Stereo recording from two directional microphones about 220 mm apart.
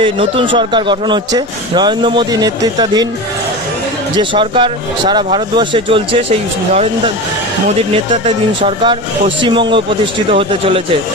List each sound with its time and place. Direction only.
0.0 s speech: 25° right (ahead or behind)
4.2 s speech: 20° right (ahead or behind)
7.7 s speech: 25° right (ahead or behind)